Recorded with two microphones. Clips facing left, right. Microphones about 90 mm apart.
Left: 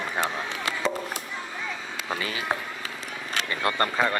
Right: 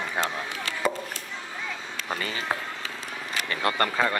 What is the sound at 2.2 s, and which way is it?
Speech, 5° left (ahead or behind).